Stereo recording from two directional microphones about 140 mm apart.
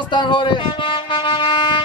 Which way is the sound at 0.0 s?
35° left (ahead or behind).